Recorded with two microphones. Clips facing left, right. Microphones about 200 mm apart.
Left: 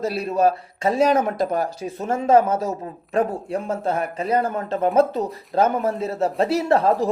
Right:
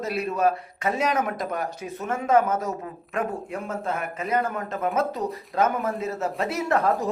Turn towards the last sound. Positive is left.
turn(degrees=30)  # may be behind; listen again after turning